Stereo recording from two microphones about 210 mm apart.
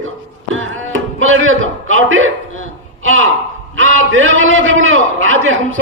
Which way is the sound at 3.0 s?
70° right (ahead or behind).